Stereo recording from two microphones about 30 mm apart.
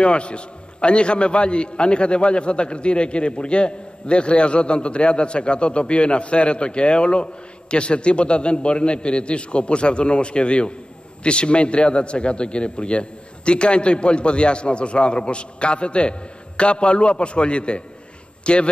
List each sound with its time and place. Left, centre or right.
0.0 s a man's voice: left